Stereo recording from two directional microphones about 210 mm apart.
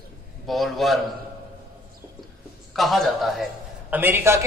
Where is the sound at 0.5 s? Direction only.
Centre (ahead or behind).